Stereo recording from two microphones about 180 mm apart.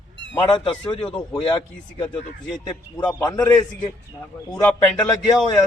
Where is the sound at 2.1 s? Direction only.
5° left (ahead or behind).